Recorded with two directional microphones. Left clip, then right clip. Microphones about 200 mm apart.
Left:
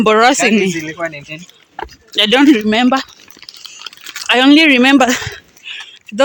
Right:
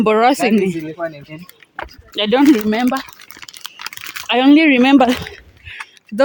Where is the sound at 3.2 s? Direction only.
50° right (ahead or behind).